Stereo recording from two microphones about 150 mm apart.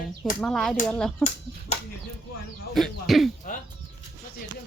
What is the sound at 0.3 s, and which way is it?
Speech, 5° left (ahead or behind).